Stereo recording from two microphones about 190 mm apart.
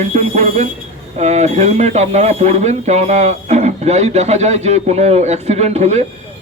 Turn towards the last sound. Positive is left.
turn(degrees=-35)  # may be behind; listen again after turning